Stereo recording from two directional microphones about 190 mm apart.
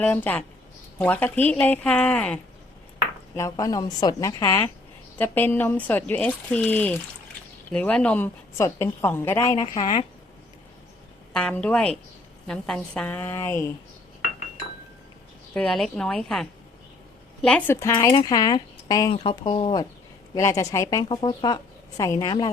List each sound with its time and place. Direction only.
0.0 s a woman's voice: 10° left (ahead or behind)
3.3 s a woman's voice: 15° left (ahead or behind)
11.3 s a woman's voice: 5° left (ahead or behind)
15.5 s speech: 5° left (ahead or behind)
17.7 s a woman's voice: 15° left (ahead or behind)